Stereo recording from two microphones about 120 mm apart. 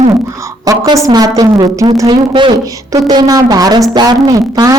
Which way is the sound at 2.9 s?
30° right (ahead or behind).